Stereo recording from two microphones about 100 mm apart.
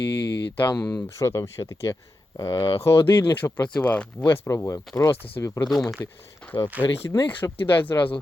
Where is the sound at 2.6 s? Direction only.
65° left (ahead or behind).